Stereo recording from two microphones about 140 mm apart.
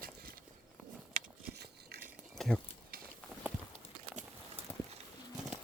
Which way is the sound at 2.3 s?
5° left (ahead or behind).